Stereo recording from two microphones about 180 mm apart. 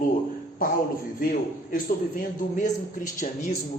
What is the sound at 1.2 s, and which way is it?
Speech, 50° left (ahead or behind).